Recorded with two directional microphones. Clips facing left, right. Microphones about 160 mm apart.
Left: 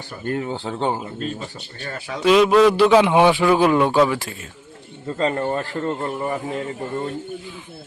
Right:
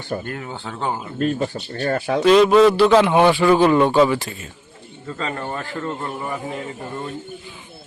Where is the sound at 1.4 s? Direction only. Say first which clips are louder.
Right 10 dB; 50° right (ahead or behind).